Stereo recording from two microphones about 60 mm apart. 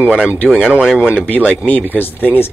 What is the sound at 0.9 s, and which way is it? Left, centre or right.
Speech, centre.